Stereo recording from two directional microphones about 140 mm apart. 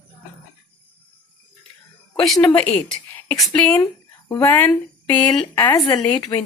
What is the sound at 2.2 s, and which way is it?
Speech, 5° left (ahead or behind).